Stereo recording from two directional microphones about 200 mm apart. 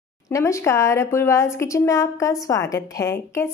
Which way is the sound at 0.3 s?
15° left (ahead or behind).